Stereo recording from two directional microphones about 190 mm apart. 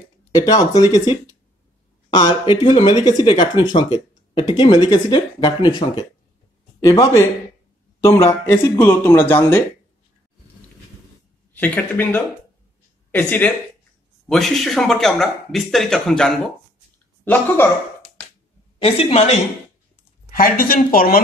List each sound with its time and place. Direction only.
0.3 s speech: 20° left (ahead or behind)
11.5 s speech: 10° left (ahead or behind)
18.8 s a woman's voice: 30° left (ahead or behind)
20.2 s speech: 50° left (ahead or behind)